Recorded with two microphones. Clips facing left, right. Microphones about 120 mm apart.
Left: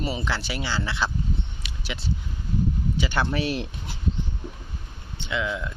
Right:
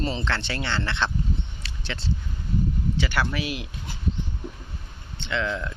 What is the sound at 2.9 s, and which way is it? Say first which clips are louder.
Speech: left 2 dB; 20° left (ahead or behind).